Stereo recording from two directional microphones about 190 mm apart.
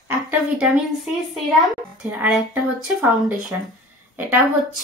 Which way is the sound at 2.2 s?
5° right (ahead or behind).